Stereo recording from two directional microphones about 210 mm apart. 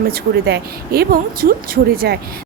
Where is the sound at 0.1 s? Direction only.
50° right (ahead or behind).